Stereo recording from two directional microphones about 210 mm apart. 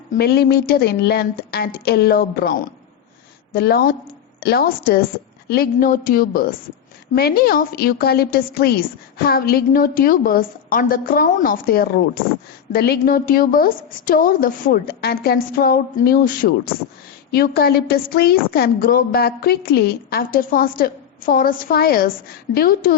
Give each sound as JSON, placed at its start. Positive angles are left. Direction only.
{"t": 0.2, "sound": "a woman's voice", "side_deg": 50}